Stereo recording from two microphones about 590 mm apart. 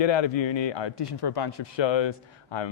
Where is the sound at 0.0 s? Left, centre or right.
Left.